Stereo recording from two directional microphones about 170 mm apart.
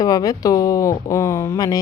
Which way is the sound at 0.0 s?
20° left (ahead or behind).